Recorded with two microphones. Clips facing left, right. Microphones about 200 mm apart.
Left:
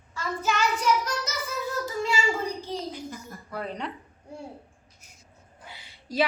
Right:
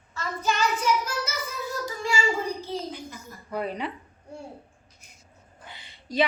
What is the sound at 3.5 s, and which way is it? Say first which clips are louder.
Speech: right 4 dB; 10° right (ahead or behind).